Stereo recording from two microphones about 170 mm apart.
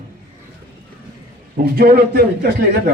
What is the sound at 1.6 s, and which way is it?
Speech, 65° right (ahead or behind).